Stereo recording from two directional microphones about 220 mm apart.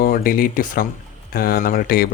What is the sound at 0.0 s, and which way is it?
Speech, 40° left (ahead or behind).